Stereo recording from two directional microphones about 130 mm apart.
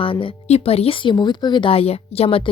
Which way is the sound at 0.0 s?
45° left (ahead or behind).